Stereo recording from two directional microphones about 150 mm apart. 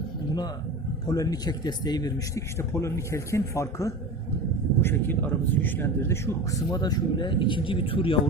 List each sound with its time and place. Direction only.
1.0 s speech: 25° left (ahead or behind)